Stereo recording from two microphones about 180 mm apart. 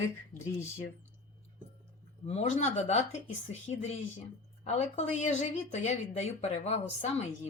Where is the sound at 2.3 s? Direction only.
40° left (ahead or behind).